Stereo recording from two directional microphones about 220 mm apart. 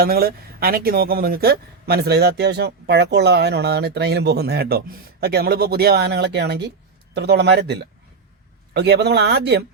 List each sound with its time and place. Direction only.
0.0 s speech: 45° right (ahead or behind)